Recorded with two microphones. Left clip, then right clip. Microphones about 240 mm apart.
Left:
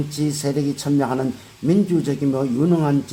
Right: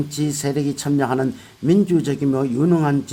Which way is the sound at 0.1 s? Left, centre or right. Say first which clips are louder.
Left 2 dB; right.